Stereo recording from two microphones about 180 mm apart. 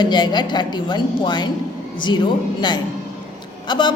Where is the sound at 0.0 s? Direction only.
25° left (ahead or behind).